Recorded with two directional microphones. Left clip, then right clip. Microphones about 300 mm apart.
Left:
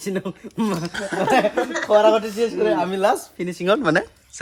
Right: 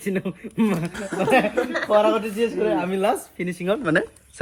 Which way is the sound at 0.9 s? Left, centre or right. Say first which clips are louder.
Left 2 dB; left.